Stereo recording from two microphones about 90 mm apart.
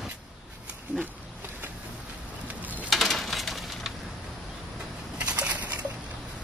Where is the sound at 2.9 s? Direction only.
Centre (ahead or behind).